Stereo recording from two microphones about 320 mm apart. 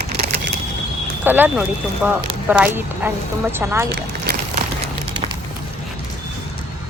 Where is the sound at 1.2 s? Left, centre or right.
Centre.